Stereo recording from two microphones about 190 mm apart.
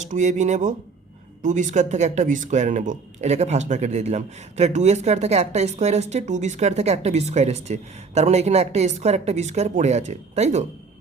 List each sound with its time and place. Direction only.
0.1 s speech: 40° right (ahead or behind)